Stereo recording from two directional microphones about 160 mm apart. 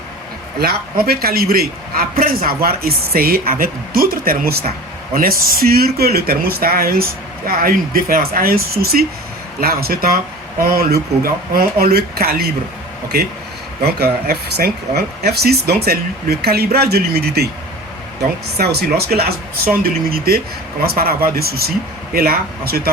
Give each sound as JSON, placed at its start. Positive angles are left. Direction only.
{"t": 0.6, "sound": "a man's voice", "side_deg": -75}
{"t": 13.8, "sound": "speech", "side_deg": -80}
{"t": 18.5, "sound": "a man's voice", "side_deg": -80}